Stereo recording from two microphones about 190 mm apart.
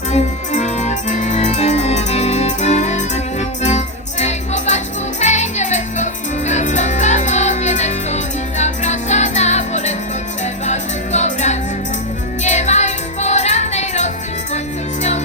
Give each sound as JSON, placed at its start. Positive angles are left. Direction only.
{"t": 0.1, "sound": "music", "side_deg": 35}